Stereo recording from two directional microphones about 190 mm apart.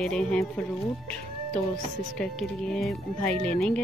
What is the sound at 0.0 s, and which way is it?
Speech, 5° left (ahead or behind).